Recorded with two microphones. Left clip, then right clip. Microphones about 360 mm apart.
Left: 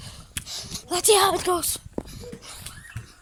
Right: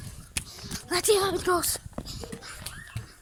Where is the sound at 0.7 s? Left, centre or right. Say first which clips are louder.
Left 1 dB; centre.